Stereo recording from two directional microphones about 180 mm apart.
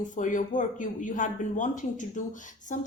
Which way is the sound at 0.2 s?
45° left (ahead or behind).